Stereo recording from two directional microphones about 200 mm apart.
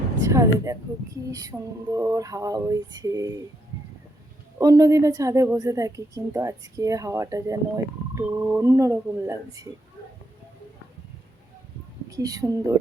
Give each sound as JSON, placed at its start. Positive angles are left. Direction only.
{"t": 0.2, "sound": "speech", "side_deg": -15}
{"t": 4.5, "sound": "speech", "side_deg": -15}
{"t": 12.1, "sound": "speech", "side_deg": -15}